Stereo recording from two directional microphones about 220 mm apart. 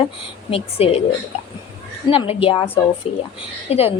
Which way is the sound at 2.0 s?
25° left (ahead or behind).